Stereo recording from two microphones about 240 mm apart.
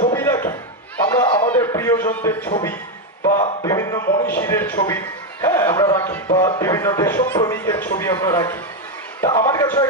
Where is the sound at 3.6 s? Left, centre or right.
Centre.